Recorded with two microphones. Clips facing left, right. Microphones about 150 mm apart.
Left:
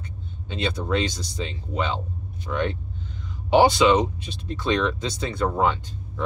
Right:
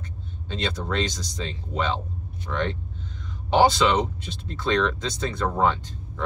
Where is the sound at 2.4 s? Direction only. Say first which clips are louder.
Left 2 dB; 15° left (ahead or behind).